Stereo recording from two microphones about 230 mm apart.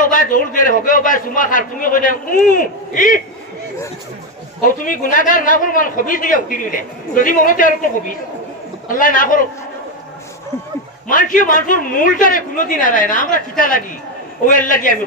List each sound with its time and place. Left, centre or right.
0.0 s a man's voice: left
4.6 s a man's voice: left
11.1 s a man's voice: left